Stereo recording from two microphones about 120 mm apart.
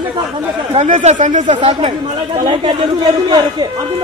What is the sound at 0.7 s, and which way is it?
Speech, 70° right (ahead or behind).